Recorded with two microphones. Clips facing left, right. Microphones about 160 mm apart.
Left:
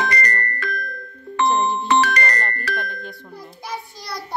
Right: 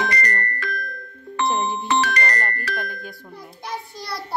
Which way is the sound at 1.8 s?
60° left (ahead or behind).